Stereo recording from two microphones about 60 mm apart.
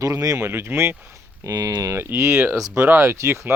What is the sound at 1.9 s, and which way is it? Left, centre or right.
Speech, right.